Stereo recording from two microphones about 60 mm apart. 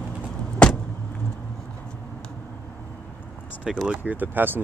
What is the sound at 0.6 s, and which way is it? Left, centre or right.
Vehicle, centre.